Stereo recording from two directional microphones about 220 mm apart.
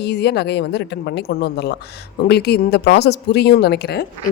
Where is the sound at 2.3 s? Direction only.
50° left (ahead or behind).